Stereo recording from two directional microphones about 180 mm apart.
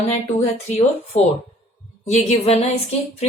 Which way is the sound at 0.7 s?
35° left (ahead or behind).